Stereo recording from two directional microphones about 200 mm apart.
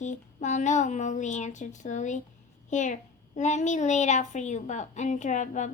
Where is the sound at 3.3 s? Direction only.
35° left (ahead or behind).